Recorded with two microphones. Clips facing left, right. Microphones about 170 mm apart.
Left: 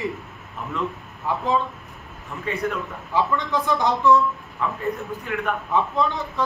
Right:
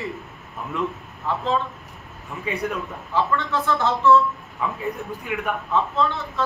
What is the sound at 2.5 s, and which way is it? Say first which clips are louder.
Speech: even; 10° right (ahead or behind).